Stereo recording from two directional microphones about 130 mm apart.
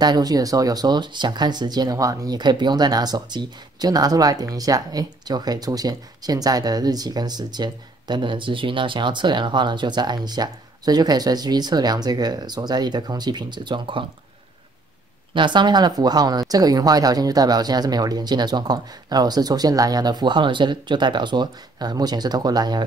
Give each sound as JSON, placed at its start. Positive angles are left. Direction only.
{"t": 0.0, "sound": "speech", "side_deg": -30}
{"t": 15.3, "sound": "speech", "side_deg": -35}